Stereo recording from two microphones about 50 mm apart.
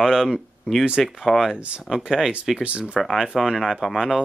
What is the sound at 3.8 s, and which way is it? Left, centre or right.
Speech, centre.